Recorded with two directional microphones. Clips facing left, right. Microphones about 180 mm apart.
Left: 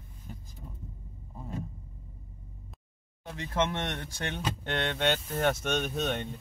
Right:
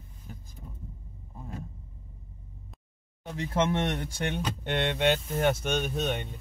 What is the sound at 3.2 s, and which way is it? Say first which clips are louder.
Speech: right 3 dB; 15° right (ahead or behind).